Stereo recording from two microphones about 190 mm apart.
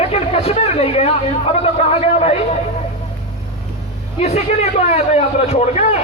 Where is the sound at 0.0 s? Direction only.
30° left (ahead or behind).